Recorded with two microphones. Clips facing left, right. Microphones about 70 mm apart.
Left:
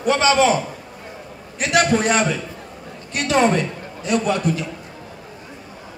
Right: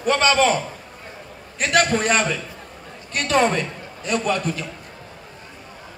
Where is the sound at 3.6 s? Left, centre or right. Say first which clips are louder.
Left 3 dB; right.